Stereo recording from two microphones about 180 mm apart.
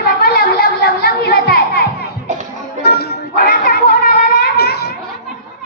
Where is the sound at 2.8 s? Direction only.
60° left (ahead or behind).